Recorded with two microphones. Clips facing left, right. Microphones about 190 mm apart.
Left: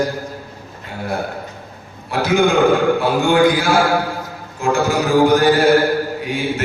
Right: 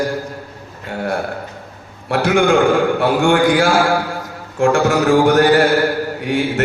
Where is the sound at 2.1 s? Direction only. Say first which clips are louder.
Right 2 dB; 70° right (ahead or behind).